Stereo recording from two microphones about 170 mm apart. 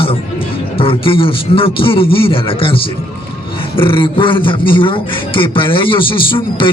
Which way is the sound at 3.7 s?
30° left (ahead or behind).